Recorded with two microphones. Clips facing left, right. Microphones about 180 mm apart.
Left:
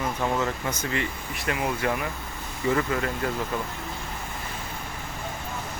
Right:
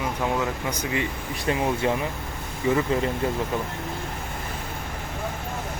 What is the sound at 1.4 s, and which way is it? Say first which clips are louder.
Speech: right 3 dB; 25° right (ahead or behind).